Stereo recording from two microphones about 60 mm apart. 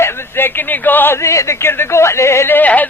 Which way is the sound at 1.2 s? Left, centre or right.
Left.